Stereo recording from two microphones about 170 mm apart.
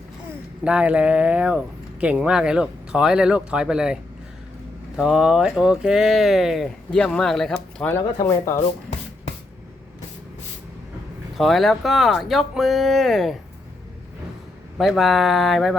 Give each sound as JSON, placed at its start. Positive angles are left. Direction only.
{"t": 0.6, "sound": "speech", "side_deg": -5}
{"t": 4.9, "sound": "speech", "side_deg": -5}
{"t": 7.9, "sound": "speech", "side_deg": 15}
{"t": 11.3, "sound": "speech", "side_deg": 0}
{"t": 14.8, "sound": "speech", "side_deg": 0}